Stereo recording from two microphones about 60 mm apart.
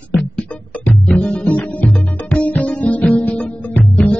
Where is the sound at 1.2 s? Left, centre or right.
Left.